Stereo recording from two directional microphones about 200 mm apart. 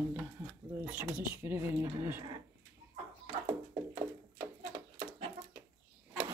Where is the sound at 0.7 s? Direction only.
5° right (ahead or behind).